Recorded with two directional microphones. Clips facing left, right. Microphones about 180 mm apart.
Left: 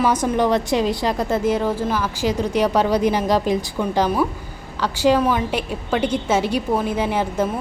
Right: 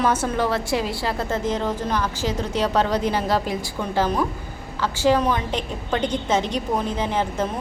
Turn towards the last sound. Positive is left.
turn(degrees=10)  # may be behind; listen again after turning